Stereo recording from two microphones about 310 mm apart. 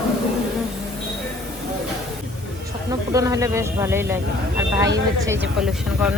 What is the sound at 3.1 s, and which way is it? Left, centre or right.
Speech, centre.